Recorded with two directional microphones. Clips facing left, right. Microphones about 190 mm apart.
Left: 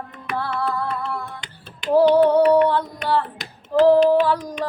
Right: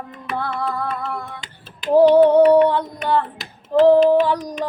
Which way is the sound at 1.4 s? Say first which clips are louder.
Right 1 dB; 5° right (ahead or behind).